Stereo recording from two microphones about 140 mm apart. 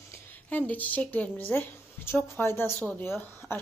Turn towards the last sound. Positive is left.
turn(degrees=15)  # may be behind; listen again after turning